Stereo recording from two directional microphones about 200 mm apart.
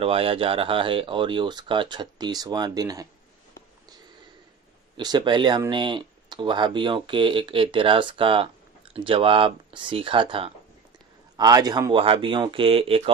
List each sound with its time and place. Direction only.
0.0 s speech: 30° right (ahead or behind)
4.9 s speech: 20° right (ahead or behind)